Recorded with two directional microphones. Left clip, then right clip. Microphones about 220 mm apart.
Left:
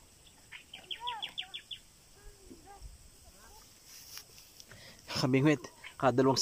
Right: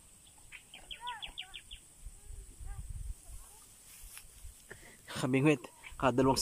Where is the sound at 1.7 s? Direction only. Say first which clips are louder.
Left 7 dB; 35° left (ahead or behind).